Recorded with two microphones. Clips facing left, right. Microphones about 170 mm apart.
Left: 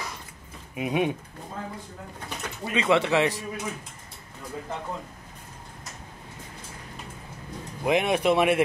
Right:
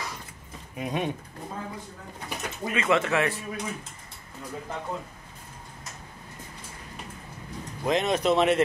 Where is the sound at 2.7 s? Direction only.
15° left (ahead or behind).